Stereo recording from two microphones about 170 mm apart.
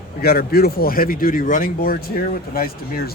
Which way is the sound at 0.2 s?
65° left (ahead or behind).